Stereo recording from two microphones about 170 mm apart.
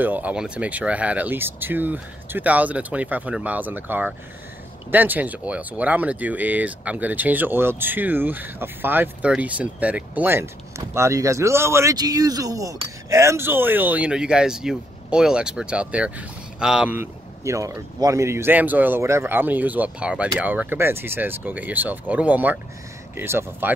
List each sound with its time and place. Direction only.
0.0 s speech: 10° right (ahead or behind)